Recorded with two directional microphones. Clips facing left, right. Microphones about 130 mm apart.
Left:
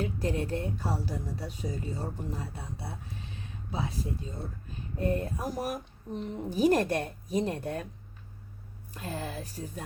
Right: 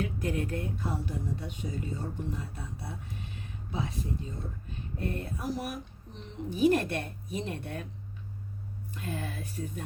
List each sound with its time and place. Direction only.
0.0 s speech: 35° left (ahead or behind)
8.9 s speech: 35° left (ahead or behind)